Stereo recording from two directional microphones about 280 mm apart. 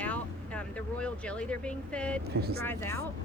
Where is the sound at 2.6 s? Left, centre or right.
Centre.